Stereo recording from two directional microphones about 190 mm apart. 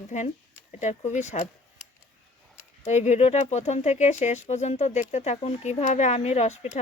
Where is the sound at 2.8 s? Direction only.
35° left (ahead or behind).